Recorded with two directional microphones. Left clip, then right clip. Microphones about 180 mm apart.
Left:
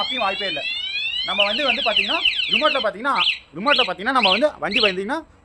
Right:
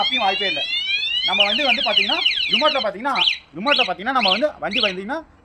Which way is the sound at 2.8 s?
15° left (ahead or behind).